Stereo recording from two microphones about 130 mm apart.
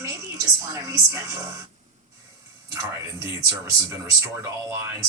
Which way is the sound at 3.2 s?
20° right (ahead or behind).